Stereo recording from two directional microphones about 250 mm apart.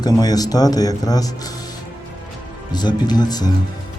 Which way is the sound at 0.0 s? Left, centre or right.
Centre.